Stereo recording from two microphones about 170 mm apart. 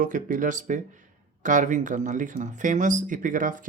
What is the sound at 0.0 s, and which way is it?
Speech, 50° right (ahead or behind).